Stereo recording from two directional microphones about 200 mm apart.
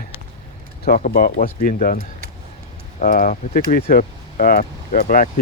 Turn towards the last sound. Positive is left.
turn(degrees=45)  # may be behind; listen again after turning